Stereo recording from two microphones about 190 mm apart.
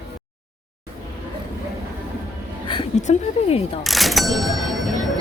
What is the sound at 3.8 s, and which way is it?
Speech, centre (ahead or behind).